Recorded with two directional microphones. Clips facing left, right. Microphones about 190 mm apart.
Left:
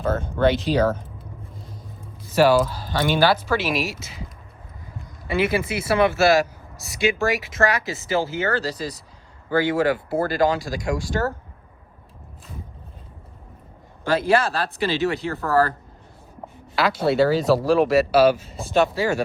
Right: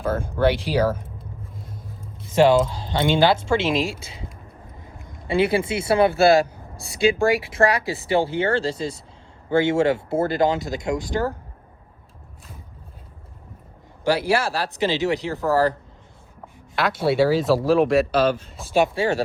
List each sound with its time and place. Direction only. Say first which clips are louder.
0.0 s speech: even; 10° right (ahead or behind)
2.3 s speech: right 1 dB; 25° right (ahead or behind)
5.3 s speech: right 2 dB; 30° right (ahead or behind)
14.0 s speech: left 1 dB; 10° right (ahead or behind)
17.1 s speech: even; centre (ahead or behind)
18.9 s speech: right 1 dB; 30° right (ahead or behind)